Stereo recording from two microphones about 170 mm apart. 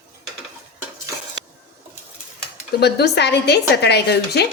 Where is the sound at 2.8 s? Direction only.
80° left.